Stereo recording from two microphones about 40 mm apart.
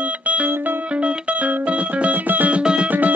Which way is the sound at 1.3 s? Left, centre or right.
Right.